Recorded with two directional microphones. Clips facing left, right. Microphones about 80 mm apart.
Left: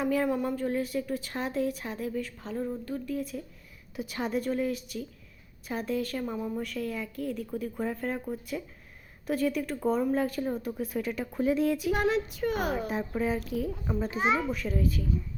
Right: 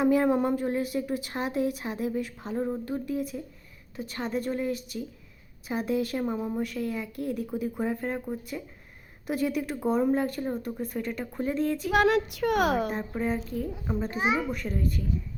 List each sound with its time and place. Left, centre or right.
0.0 s speech: centre
0.3 s speech: right
0.5 s speech: centre
2.6 s speech: right
2.8 s speech: centre
3.9 s speech: centre
6.6 s speech: centre
7.3 s speech: centre
11.9 s speech: right
12.9 s speech: centre
14.2 s speech: centre